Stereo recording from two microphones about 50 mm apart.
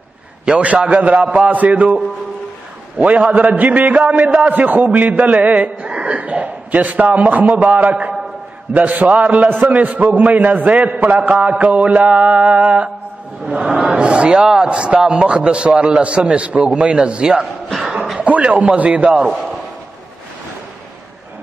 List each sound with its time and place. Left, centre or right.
0.6 s a man's voice: right
3.0 s a man's voice: right
17.7 s a sound: centre
18.2 s a man's voice: right